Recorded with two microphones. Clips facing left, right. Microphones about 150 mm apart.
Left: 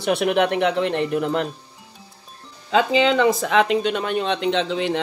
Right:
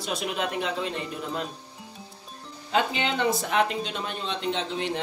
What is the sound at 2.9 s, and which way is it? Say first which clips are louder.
Speech: left 9 dB; 90° left.